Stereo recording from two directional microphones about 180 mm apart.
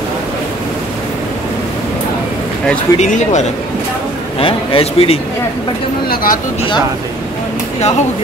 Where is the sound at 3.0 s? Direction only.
40° left (ahead or behind).